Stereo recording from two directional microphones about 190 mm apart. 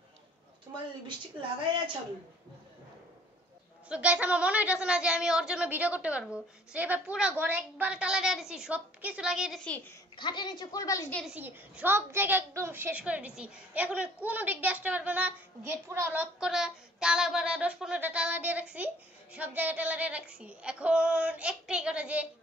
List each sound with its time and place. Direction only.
3.9 s a woman's voice: 5° right (ahead or behind); by 9.9 s 10° left (ahead or behind)
10.1 s a woman's voice: 25° left (ahead or behind)
11.3 s a woman's voice: 10° right (ahead or behind)